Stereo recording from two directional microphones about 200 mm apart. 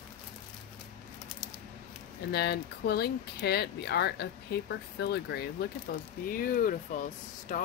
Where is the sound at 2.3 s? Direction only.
55° left (ahead or behind).